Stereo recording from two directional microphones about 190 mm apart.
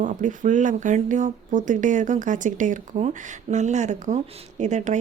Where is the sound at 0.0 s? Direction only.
45° right (ahead or behind).